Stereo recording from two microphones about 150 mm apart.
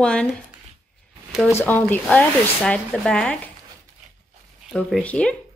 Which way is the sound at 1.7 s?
10° left (ahead or behind).